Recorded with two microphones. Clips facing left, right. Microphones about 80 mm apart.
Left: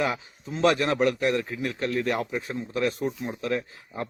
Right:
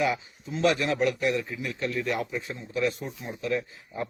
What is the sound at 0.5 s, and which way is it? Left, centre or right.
A man's voice, left.